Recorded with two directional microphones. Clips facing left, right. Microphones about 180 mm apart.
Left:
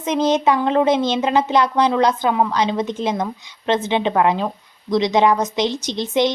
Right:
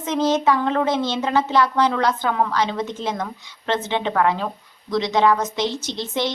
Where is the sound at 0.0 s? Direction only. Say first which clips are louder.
Left 2 dB; 15° left (ahead or behind).